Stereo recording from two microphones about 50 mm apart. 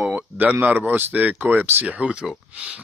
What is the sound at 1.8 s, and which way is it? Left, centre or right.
Speech, right.